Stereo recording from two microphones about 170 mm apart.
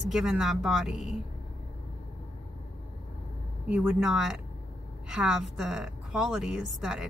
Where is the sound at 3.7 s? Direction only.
5° right (ahead or behind).